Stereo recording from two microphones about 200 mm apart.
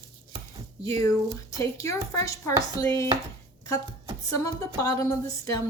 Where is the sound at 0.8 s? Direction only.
15° left (ahead or behind).